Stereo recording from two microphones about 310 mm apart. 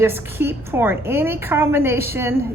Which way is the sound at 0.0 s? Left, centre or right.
Centre.